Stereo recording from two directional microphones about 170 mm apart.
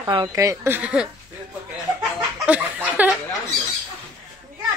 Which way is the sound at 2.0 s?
5° right (ahead or behind).